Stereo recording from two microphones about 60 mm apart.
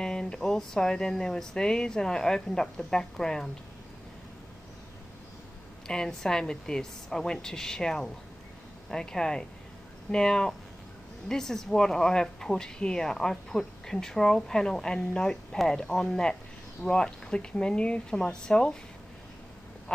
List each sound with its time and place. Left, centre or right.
0.0 s speech: centre
5.9 s speech: centre